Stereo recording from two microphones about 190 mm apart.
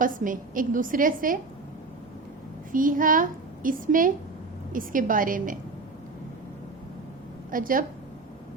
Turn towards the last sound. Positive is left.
turn(degrees=-45)  # may be behind; listen again after turning